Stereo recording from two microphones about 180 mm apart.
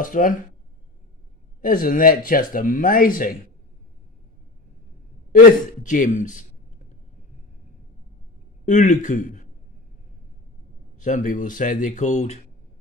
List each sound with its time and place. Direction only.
0.0 s speech: 50° left (ahead or behind)
1.6 s speech: 50° left (ahead or behind)
5.3 s speech: 50° left (ahead or behind)
8.6 s speech: 45° left (ahead or behind)
11.0 s speech: 45° left (ahead or behind)